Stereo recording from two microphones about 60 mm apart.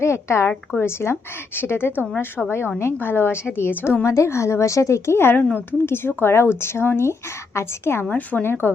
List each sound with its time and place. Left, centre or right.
0.0 s a woman's voice: left
4.0 s a woman's voice: left
8.1 s a woman's voice: left